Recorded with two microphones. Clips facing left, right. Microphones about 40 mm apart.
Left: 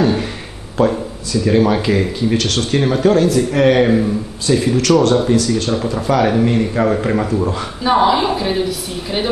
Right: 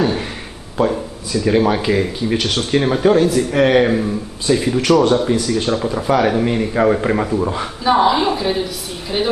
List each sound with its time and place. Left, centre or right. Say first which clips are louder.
0.0 s a sound: left 2 dB; centre
0.8 s a woman's voice: left 2 dB; centre
5.3 s speech: left 2 dB; right
5.7 s a man's voice: even; centre
7.8 s a woman's voice: left 1 dB; centre